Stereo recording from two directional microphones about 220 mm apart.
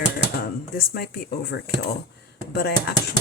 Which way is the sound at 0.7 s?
45° left (ahead or behind).